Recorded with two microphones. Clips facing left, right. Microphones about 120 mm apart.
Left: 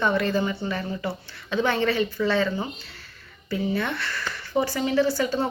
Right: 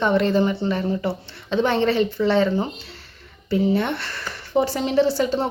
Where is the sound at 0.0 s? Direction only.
25° right (ahead or behind).